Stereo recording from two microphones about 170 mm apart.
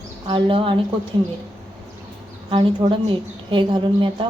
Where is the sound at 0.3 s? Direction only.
30° right (ahead or behind).